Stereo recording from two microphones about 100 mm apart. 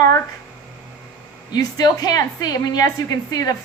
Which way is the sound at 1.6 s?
40° left (ahead or behind).